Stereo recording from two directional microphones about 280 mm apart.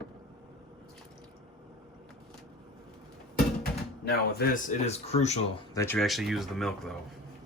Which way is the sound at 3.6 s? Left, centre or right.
Left.